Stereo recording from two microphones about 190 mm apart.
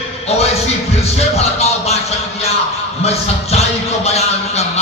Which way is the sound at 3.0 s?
35° left (ahead or behind).